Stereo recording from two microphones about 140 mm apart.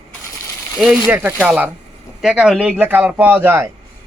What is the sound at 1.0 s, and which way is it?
A man's voice, 15° right (ahead or behind).